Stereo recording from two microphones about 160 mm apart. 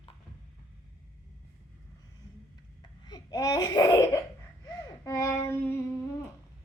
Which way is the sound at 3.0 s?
25° left (ahead or behind).